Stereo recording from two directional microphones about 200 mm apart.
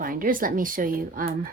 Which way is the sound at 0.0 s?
45° right (ahead or behind).